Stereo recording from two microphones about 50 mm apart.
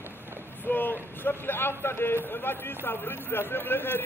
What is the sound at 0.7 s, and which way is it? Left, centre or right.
A man's voice, left.